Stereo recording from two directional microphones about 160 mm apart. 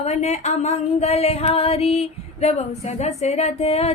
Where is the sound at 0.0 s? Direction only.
45° left (ahead or behind).